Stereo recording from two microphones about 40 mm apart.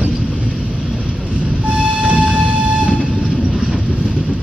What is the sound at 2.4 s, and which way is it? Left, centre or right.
Train, right.